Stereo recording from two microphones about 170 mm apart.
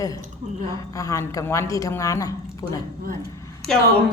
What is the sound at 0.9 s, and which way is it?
Speech, 20° left (ahead or behind).